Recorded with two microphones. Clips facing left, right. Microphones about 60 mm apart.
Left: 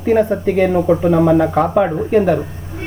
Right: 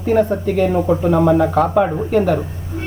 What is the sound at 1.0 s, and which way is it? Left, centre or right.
Speech, centre.